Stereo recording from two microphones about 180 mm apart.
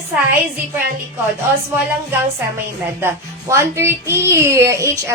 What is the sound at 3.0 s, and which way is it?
Speech, 15° right (ahead or behind).